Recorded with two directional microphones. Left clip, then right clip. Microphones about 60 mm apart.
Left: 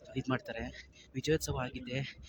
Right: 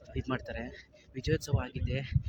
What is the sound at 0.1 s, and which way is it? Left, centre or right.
Speech, left.